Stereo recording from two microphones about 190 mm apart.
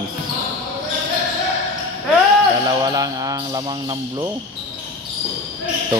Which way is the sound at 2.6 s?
20° right (ahead or behind).